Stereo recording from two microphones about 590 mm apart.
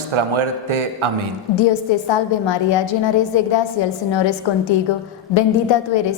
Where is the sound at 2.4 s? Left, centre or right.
Left.